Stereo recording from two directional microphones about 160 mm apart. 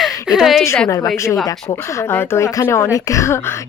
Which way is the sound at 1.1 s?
20° left (ahead or behind).